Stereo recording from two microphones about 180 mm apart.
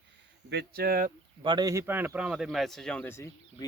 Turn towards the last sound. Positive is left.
turn(degrees=15)  # may be behind; listen again after turning